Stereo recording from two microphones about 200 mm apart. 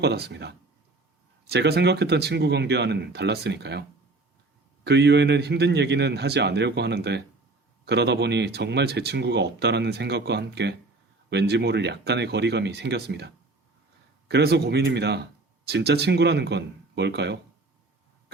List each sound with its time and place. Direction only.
0.0 s speech: 55° right (ahead or behind)